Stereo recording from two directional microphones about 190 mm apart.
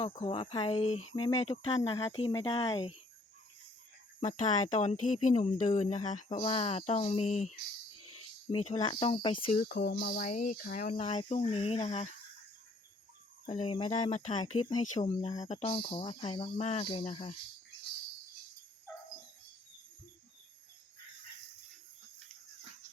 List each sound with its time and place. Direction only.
0.0 s speech: 30° left (ahead or behind)
4.2 s speech: 40° left (ahead or behind)
9.6 s speech: 55° left (ahead or behind); by 12.0 s 35° left (ahead or behind)
13.5 s speech: 30° left (ahead or behind)